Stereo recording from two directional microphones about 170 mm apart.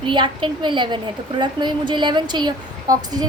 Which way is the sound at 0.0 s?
30° right (ahead or behind).